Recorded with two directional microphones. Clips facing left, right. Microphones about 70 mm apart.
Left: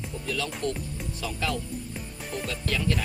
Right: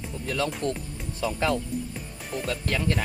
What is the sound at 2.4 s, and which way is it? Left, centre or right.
Speech, right.